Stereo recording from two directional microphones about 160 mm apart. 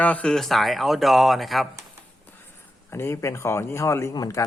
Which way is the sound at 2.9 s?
15° left (ahead or behind).